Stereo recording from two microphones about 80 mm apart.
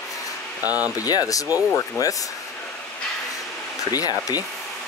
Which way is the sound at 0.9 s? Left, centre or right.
Left.